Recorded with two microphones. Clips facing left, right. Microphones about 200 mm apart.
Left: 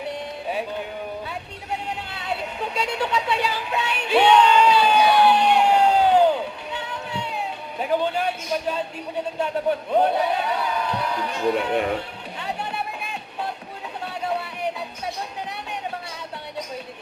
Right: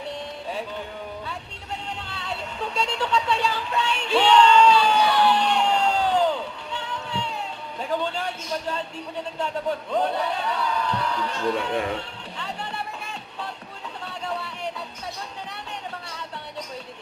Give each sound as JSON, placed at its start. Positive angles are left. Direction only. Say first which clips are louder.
{"t": 1.9, "sound": "a sound", "louder": "left 4 dB", "side_deg": 10}
{"t": 7.8, "sound": "a man's voice", "louder": "left 4 dB", "side_deg": 15}
{"t": 9.9, "sound": "a man's voice", "louder": "left 5 dB", "side_deg": 15}